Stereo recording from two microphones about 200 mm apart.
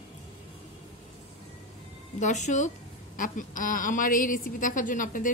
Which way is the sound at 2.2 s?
35° left (ahead or behind).